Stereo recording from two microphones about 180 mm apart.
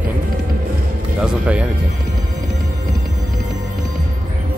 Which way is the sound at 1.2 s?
5° right (ahead or behind).